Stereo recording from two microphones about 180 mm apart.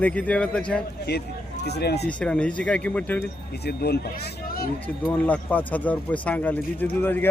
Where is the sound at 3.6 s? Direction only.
65° left (ahead or behind).